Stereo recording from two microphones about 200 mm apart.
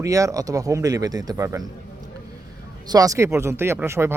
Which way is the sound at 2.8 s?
20° right (ahead or behind).